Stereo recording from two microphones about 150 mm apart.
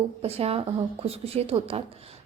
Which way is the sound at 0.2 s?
45° right (ahead or behind).